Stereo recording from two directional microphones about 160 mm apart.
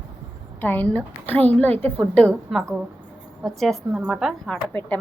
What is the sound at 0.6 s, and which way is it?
Speech, 10° left (ahead or behind).